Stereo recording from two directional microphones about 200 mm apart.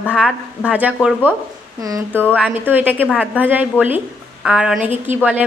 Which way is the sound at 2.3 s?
5° right (ahead or behind).